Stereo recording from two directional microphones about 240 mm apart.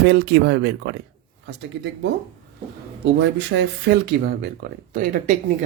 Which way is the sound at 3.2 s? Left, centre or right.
Right.